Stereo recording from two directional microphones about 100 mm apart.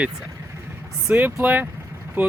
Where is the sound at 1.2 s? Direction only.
20° right (ahead or behind).